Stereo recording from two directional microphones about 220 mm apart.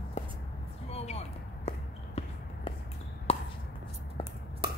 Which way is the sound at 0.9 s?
30° left (ahead or behind).